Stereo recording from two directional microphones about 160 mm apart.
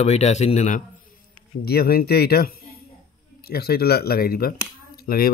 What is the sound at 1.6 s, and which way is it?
Speech, 75° left (ahead or behind).